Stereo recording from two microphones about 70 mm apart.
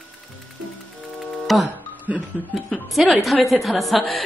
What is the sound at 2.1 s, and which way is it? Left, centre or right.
Speech, centre.